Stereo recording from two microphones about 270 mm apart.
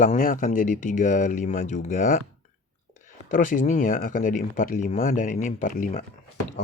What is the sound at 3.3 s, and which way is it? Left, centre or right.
Speech, left.